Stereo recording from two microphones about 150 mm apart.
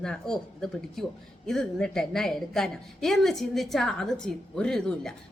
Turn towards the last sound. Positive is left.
turn(degrees=5)  # may be behind; listen again after turning